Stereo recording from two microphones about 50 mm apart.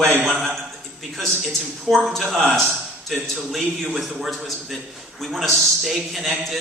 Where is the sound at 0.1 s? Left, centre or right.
Right.